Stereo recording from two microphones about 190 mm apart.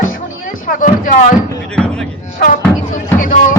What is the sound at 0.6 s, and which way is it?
Speech, 45° left (ahead or behind).